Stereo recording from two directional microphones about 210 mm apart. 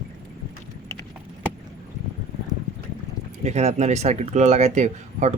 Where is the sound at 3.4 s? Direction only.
30° right (ahead or behind).